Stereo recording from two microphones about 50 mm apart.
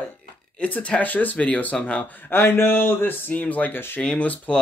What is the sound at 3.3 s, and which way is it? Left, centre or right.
Speech, left.